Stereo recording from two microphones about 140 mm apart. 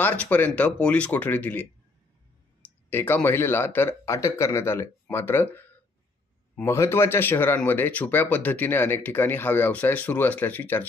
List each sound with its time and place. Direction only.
0.0 s speech: 15° left (ahead or behind)
2.9 s speech: 15° left (ahead or behind)
6.5 s speech: 20° left (ahead or behind)